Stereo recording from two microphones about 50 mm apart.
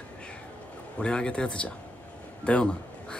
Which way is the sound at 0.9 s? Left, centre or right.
Centre.